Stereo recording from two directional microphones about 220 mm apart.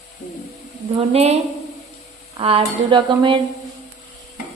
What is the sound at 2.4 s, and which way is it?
Speech, 25° right (ahead or behind).